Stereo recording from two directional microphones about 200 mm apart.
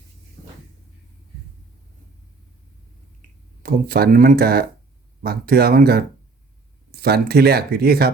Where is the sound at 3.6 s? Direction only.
45° right (ahead or behind).